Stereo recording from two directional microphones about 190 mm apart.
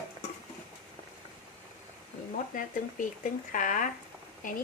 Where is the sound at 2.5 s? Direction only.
45° left (ahead or behind).